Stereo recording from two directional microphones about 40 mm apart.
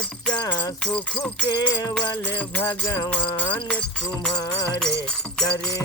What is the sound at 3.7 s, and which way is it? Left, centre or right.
Music, centre.